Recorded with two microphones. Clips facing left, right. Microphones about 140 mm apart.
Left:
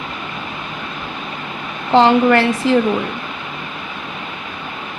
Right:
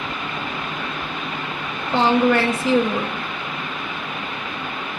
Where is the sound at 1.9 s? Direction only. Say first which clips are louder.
Left 5 dB; 90° left.